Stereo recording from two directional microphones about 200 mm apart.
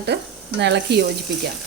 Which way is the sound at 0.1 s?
60° right (ahead or behind).